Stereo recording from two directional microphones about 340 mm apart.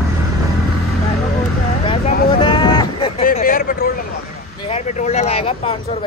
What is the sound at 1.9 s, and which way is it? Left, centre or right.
Vehicle, centre.